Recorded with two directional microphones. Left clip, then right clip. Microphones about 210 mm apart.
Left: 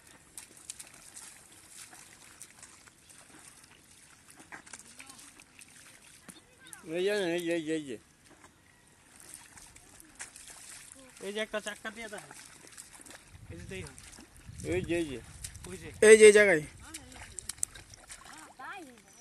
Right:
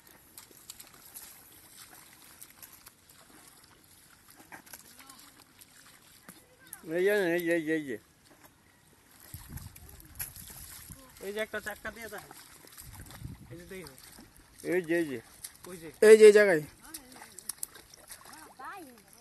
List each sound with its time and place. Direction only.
0.4 s a sound: 30° left (ahead or behind)
4.5 s dog: 35° right (ahead or behind)
6.9 s speech: 40° right (ahead or behind)
10.1 s splash: 25° right (ahead or behind)
11.1 s speech: 50° left (ahead or behind)
12.4 s a sound: 50° left (ahead or behind)
13.7 s speech: 40° left (ahead or behind)
14.7 s speech: 35° right (ahead or behind)
16.0 s a man's voice: 5° right (ahead or behind)
16.9 s a sound: 10° left (ahead or behind)
17.7 s splash: 10° left (ahead or behind)